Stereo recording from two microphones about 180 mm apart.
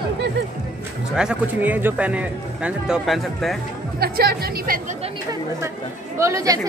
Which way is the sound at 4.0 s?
60° right (ahead or behind).